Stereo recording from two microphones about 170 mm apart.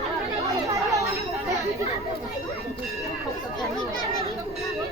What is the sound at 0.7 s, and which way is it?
Chatter, 20° right (ahead or behind).